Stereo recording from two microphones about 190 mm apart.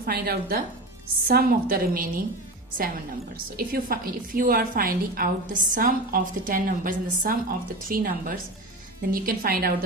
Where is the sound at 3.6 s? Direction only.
50° right (ahead or behind).